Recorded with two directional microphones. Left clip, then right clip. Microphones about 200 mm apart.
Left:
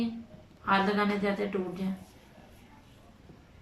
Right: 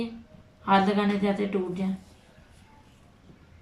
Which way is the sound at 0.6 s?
15° right (ahead or behind).